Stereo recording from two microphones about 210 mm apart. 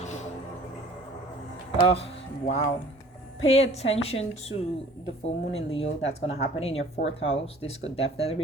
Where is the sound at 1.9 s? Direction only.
25° left (ahead or behind).